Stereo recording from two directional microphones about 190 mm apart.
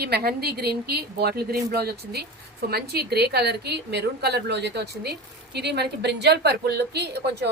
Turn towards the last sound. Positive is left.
turn(degrees=-60)  # may be behind; listen again after turning